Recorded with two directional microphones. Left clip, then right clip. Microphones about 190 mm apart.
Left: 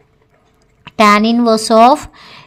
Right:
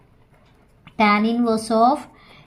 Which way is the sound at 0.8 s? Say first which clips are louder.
Left 8 dB; 45° left (ahead or behind).